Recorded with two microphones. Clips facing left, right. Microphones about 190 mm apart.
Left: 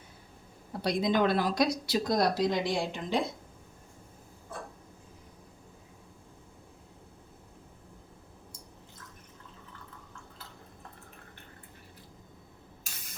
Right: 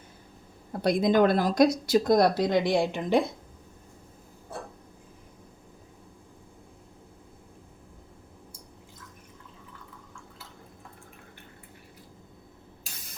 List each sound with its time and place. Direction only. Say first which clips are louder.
0.7 s speech: right 5 dB; 50° right (ahead or behind)